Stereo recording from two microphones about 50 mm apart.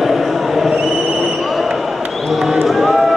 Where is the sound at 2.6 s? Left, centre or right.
Centre.